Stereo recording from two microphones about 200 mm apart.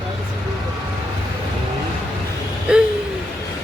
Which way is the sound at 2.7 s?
5° right (ahead or behind).